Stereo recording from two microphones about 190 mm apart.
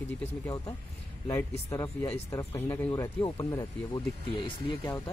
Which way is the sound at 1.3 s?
15° left (ahead or behind).